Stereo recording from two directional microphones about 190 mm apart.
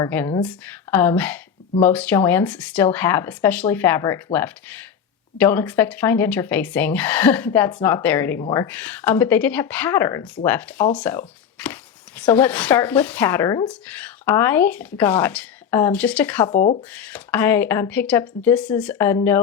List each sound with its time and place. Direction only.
0.0 s speech: 10° left (ahead or behind)
8.6 s speech: 5° left (ahead or behind)
16.6 s speech: 45° left (ahead or behind)
16.9 s speech: 5° left (ahead or behind)